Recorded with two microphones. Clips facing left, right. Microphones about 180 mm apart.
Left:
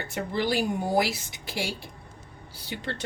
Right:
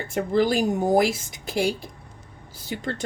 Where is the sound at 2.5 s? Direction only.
45° right (ahead or behind).